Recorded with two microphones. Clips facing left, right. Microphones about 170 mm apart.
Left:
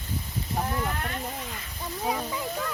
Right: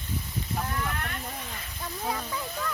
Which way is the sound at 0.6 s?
25° left (ahead or behind).